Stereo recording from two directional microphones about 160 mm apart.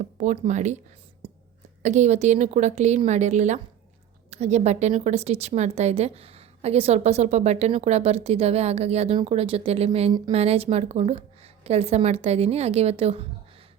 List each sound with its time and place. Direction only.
0.0 s a woman's voice: 50° right (ahead or behind)
1.2 s a sound: 40° right (ahead or behind)
1.8 s a woman's voice: 45° right (ahead or behind)